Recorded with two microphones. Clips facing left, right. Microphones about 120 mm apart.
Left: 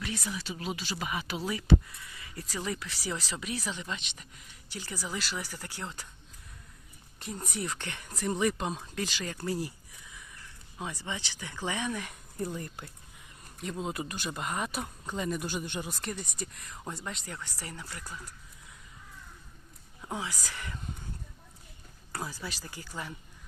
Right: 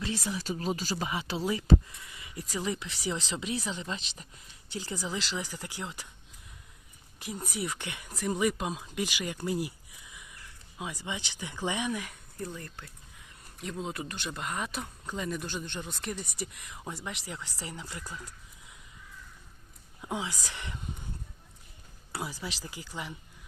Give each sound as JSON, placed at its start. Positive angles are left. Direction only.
{"t": 0.0, "sound": "speech", "side_deg": -30}
{"t": 1.0, "sound": "speech", "side_deg": -25}
{"t": 2.1, "sound": "a sound", "side_deg": -20}
{"t": 2.6, "sound": "speech", "side_deg": -25}
{"t": 7.2, "sound": "speech", "side_deg": -5}
{"t": 10.9, "sound": "speech", "side_deg": -15}
{"t": 12.5, "sound": "speech", "side_deg": 20}
{"t": 13.6, "sound": "speech", "side_deg": 0}
{"t": 16.4, "sound": "speech", "side_deg": -10}
{"t": 17.2, "sound": "speech", "side_deg": -15}
{"t": 20.0, "sound": "speech", "side_deg": -15}
{"t": 22.1, "sound": "speech", "side_deg": -10}